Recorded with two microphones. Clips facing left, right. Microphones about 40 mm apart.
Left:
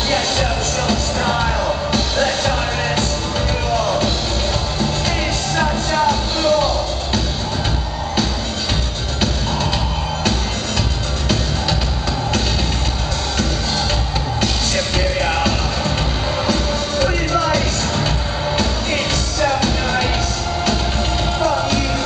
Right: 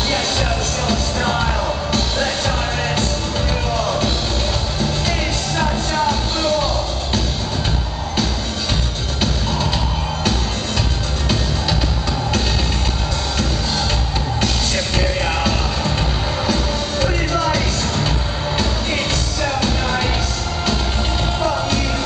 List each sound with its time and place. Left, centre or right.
0.1 s music: centre
3.7 s music: centre
5.6 s music: centre
15.0 s music: centre
17.0 s music: centre
19.6 s music: centre
21.4 s music: centre